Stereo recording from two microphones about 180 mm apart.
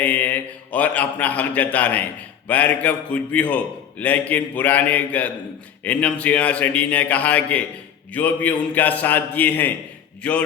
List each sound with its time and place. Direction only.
0.0 s a man's voice: 10° left (ahead or behind)